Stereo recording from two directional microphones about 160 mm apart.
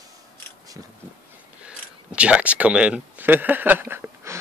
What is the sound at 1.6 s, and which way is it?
Speech, 5° right (ahead or behind).